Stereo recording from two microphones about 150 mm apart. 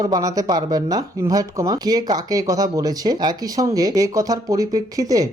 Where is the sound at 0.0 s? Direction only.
25° right (ahead or behind).